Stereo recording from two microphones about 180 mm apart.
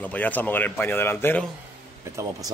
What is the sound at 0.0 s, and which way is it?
Speech, 10° left (ahead or behind).